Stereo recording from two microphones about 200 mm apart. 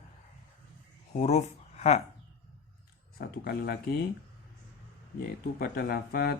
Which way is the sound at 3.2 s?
50° left (ahead or behind).